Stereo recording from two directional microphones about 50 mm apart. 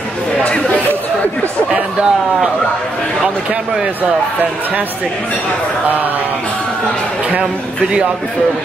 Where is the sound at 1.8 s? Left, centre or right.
Centre.